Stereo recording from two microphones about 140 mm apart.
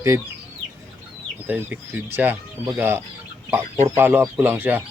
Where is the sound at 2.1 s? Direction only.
15° right (ahead or behind).